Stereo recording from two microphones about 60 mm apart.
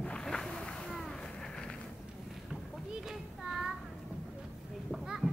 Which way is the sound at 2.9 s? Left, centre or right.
Centre.